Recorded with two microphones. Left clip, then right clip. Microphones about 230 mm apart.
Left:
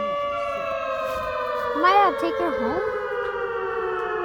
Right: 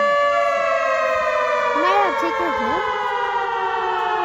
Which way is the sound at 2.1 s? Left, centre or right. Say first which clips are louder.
Right 4 dB; right.